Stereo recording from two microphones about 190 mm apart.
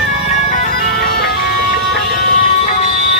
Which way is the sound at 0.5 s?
55° left (ahead or behind).